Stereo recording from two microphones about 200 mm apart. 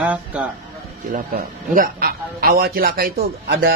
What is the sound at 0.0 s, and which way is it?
Speech, 5° right (ahead or behind).